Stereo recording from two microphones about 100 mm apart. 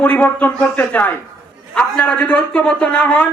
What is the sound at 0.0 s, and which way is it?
A man's voice, 15° left (ahead or behind).